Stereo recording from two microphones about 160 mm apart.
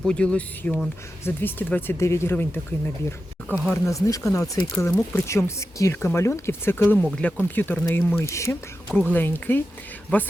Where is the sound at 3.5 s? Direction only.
10° left (ahead or behind).